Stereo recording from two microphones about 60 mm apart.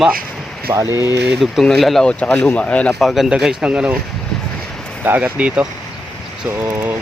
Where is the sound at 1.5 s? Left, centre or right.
Centre.